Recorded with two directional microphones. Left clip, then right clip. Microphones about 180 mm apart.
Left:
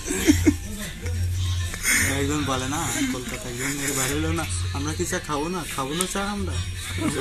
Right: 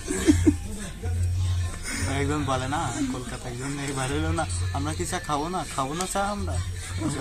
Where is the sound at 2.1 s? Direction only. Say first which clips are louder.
Left 1 dB; 20° left (ahead or behind).